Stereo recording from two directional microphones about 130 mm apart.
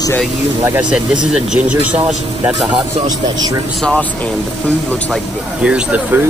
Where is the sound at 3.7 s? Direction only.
10° left (ahead or behind).